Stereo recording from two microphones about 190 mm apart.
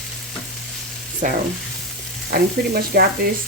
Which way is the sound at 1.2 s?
45° right (ahead or behind).